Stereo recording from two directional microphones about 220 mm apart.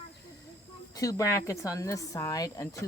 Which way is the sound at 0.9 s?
15° left (ahead or behind).